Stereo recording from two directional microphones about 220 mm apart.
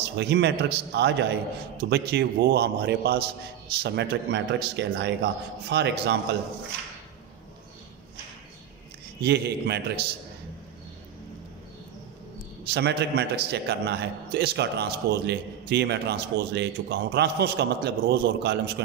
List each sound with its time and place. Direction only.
0.0 s a man's voice: 50° right (ahead or behind)
9.2 s a man's voice: 50° right (ahead or behind)
12.6 s a man's voice: 50° right (ahead or behind)